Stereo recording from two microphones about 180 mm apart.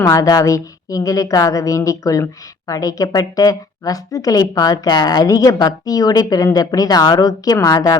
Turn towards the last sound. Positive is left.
turn(degrees=20)  # may be behind; listen again after turning